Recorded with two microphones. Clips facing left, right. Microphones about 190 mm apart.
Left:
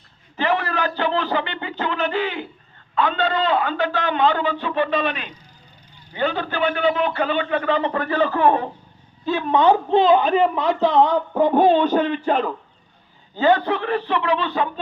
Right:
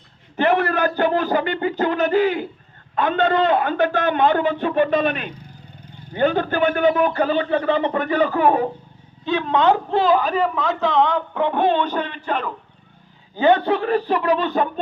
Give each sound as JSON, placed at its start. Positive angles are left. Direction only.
{"t": 0.3, "sound": "a man's voice", "side_deg": -55}
{"t": 9.2, "sound": "a man's voice", "side_deg": 10}
{"t": 13.3, "sound": "a man's voice", "side_deg": -20}
{"t": 13.7, "sound": "a man's voice", "side_deg": -40}